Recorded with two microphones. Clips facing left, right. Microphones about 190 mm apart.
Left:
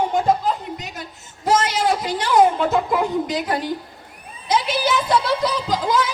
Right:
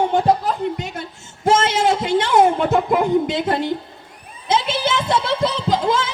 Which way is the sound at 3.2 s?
25° right (ahead or behind).